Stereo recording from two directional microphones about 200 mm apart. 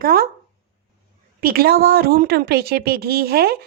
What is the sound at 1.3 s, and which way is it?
A woman's voice, 45° right (ahead or behind).